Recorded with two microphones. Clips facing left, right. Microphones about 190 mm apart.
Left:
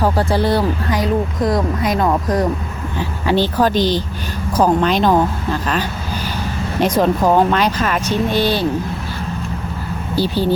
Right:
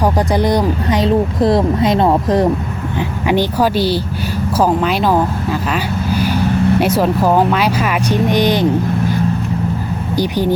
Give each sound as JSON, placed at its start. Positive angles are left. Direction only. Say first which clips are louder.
{"t": 0.0, "sound": "speech", "louder": "right 2 dB", "side_deg": -15}
{"t": 3.2, "sound": "speech", "louder": "right 1 dB", "side_deg": -15}
{"t": 10.2, "sound": "speech", "louder": "right 1 dB", "side_deg": -15}